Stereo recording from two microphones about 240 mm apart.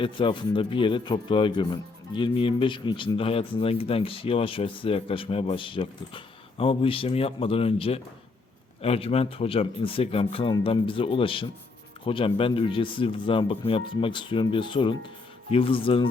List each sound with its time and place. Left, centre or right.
0.0 s a man's voice: left